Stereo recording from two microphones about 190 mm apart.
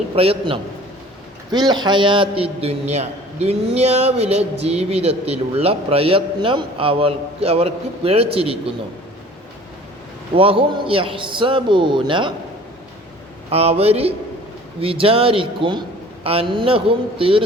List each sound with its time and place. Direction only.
0.2 s a man's voice: 30° right (ahead or behind)
10.3 s a man's voice: 30° right (ahead or behind)
13.5 s a man's voice: 30° right (ahead or behind)